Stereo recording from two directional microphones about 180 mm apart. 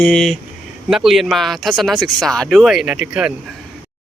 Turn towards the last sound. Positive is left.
turn(degrees=-5)  # may be behind; listen again after turning